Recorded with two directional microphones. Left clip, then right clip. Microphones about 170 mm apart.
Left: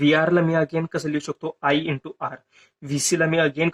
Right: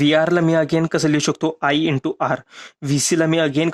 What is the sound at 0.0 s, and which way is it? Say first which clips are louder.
Speech: right 3 dB; 45° right (ahead or behind).